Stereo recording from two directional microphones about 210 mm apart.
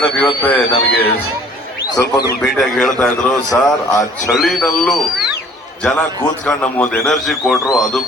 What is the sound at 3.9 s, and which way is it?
Speech, 15° left (ahead or behind).